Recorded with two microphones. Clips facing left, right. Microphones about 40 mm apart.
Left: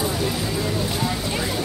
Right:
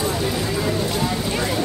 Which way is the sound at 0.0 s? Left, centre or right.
Centre.